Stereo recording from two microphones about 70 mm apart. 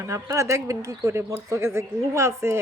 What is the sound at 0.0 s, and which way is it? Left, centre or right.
A woman's voice, right.